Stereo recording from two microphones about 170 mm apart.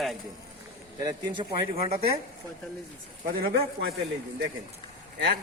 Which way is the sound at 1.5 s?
35° right (ahead or behind).